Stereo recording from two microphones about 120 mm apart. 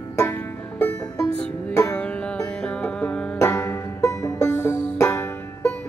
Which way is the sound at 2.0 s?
10° left (ahead or behind).